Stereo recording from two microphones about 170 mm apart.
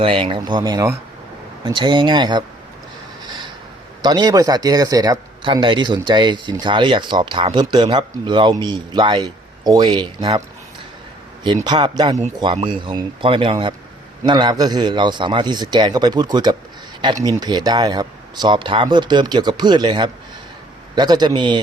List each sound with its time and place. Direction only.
0.0 s speech: 30° right (ahead or behind)
3.2 s a sound: 25° right (ahead or behind)
4.0 s speech: 25° right (ahead or behind)
11.6 s speech: 25° right (ahead or behind)